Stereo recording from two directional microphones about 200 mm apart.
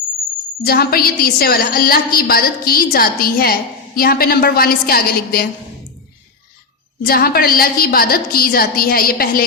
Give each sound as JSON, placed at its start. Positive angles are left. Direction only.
{"t": 0.6, "sound": "a woman's voice", "side_deg": 50}
{"t": 7.0, "sound": "a woman's voice", "side_deg": 50}